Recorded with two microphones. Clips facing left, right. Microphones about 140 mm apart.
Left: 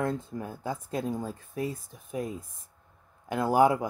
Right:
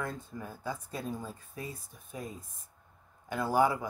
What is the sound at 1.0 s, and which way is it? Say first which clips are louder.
Speech: left 6 dB; 90° left.